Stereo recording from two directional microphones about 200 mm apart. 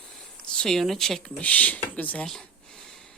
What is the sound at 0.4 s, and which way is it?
A woman's voice, 5° left (ahead or behind).